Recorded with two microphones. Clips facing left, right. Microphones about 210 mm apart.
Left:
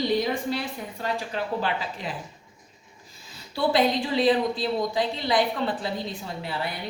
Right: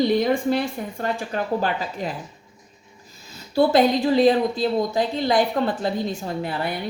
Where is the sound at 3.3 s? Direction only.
45° right (ahead or behind).